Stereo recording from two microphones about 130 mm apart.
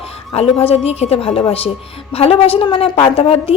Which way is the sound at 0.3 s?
50° left (ahead or behind).